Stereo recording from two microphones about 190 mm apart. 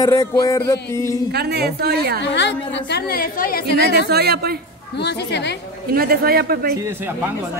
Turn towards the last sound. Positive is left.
turn(degrees=-10)  # may be behind; listen again after turning